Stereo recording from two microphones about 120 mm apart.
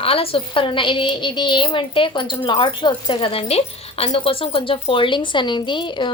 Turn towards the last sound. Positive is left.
turn(degrees=40)  # may be behind; listen again after turning